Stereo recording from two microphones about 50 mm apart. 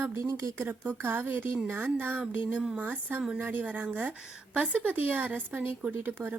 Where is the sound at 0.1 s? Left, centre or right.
Right.